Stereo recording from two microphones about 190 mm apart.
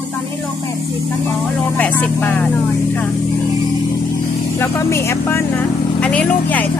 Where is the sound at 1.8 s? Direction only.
10° left (ahead or behind).